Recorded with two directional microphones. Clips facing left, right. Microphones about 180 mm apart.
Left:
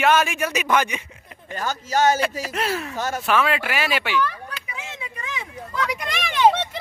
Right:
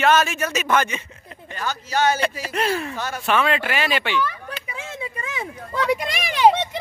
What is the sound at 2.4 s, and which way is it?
Speech, 5° left (ahead or behind).